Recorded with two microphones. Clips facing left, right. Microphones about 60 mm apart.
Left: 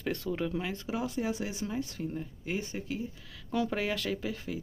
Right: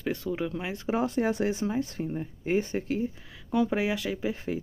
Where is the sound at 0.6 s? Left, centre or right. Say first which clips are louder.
Right 6 dB; right.